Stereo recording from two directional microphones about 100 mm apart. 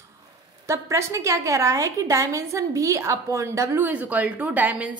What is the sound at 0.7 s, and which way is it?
A woman's voice, 30° right (ahead or behind).